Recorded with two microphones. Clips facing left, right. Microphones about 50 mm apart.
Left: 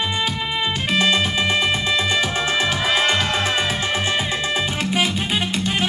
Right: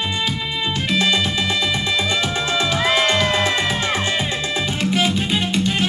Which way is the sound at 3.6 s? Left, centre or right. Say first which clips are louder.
Right 1 dB; right.